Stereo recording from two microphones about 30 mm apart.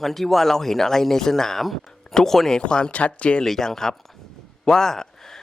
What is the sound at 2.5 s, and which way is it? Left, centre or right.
Speech, left.